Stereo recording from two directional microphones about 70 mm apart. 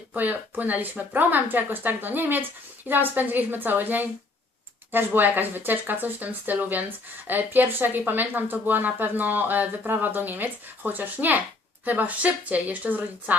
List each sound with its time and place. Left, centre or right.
0.1 s speech: right